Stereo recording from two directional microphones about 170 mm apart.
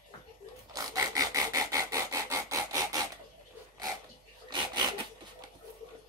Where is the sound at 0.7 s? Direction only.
20° right (ahead or behind).